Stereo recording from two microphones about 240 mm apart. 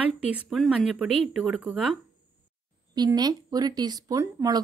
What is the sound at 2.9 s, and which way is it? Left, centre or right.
A woman's voice, centre.